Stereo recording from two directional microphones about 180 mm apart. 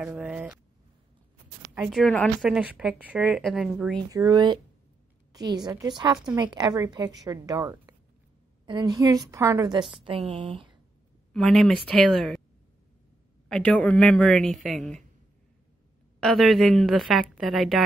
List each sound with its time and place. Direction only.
0.0 s a woman's voice: 5° right (ahead or behind)
1.8 s a woman's voice: centre (ahead or behind)
4.1 s a woman's voice: 20° right (ahead or behind)
11.3 s a woman's voice: centre (ahead or behind)
13.5 s a woman's voice: 5° left (ahead or behind)
16.2 s a woman's voice: centre (ahead or behind)